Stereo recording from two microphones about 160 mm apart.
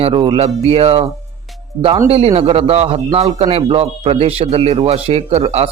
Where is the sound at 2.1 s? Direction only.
40° right (ahead or behind).